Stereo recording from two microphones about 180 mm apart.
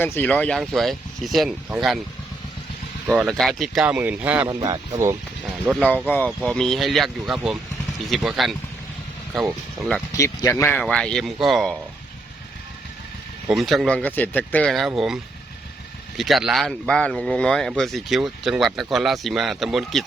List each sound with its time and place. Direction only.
0.0 s speech: 10° left (ahead or behind)
3.1 s speech: 10° right (ahead or behind)
4.4 s speech: 20° right (ahead or behind)
5.7 s speech: centre (ahead or behind)
10.2 s speech: 15° left (ahead or behind); by 11.8 s centre (ahead or behind)
13.5 s speech: centre (ahead or behind)